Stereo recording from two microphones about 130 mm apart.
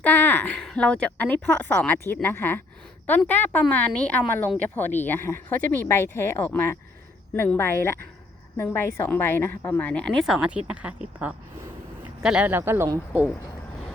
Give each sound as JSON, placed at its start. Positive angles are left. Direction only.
{"t": 0.0, "sound": "a woman's voice", "side_deg": 15}
{"t": 10.3, "sound": "speech", "side_deg": -10}